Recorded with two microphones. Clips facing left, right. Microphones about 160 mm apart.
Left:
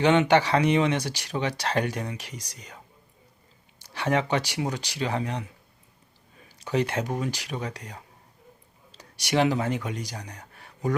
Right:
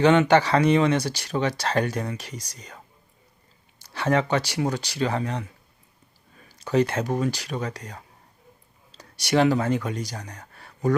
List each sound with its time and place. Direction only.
0.0 s speech: 15° left (ahead or behind)
3.8 s speech: 15° left (ahead or behind)
6.6 s speech: 15° left (ahead or behind)
9.0 s speech: 15° left (ahead or behind)